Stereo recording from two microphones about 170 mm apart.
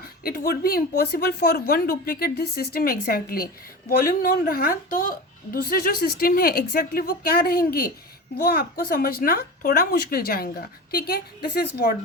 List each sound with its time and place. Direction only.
0.0 s speech: 60° left (ahead or behind)